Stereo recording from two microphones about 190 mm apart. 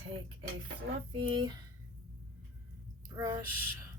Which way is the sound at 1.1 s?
25° right (ahead or behind).